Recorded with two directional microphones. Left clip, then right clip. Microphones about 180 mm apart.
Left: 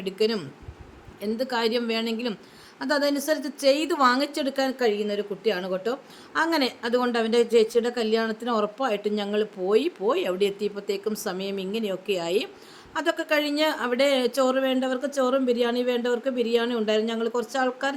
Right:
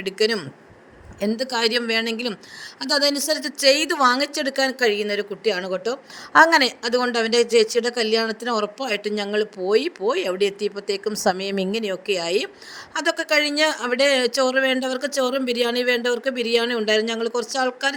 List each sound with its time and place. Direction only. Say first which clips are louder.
0.0 s a man's voice: right 4 dB; 45° right (ahead or behind)
1.4 s a man's voice: right 3 dB; 45° right (ahead or behind)